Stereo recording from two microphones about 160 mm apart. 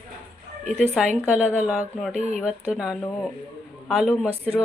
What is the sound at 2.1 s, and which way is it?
Speech, 45° right (ahead or behind).